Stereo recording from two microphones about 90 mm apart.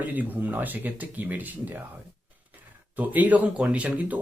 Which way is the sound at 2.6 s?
20° right (ahead or behind).